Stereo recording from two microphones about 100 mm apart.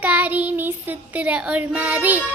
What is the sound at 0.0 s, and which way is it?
Child singing, 15° right (ahead or behind).